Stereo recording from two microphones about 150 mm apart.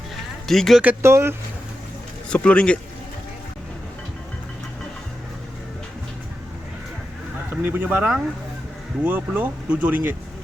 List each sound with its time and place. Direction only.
0.4 s speech: centre (ahead or behind)
0.8 s speech: 15° right (ahead or behind)
2.3 s speech: 5° left (ahead or behind)
7.5 s speech: 15° right (ahead or behind)